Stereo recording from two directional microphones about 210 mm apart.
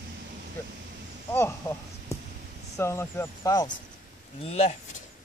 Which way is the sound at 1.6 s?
15° left (ahead or behind).